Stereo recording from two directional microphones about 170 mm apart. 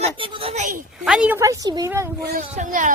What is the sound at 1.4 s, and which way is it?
Speech, 20° right (ahead or behind).